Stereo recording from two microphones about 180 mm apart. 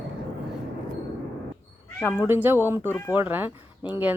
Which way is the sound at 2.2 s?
10° right (ahead or behind).